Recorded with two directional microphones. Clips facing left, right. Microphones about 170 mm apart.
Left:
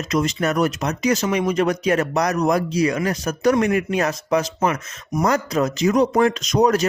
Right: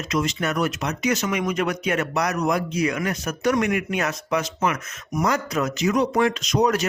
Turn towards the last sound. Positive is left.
turn(degrees=40)  # may be behind; listen again after turning